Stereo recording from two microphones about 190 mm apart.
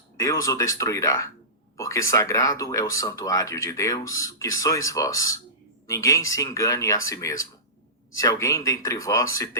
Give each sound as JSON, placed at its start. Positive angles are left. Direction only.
{"t": 0.2, "sound": "speech", "side_deg": 15}